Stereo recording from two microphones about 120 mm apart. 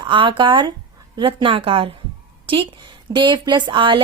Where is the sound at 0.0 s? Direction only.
45° right (ahead or behind).